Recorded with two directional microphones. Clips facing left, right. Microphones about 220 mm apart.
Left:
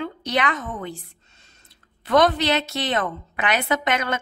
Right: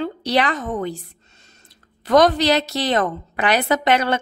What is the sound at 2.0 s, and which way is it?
A woman's voice, 40° right (ahead or behind).